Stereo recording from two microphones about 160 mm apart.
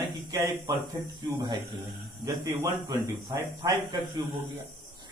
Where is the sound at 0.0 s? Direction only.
20° right (ahead or behind).